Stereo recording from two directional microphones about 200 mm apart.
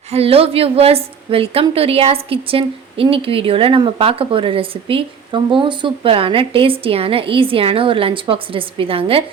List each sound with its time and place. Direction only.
0.1 s a woman's voice: 30° right (ahead or behind)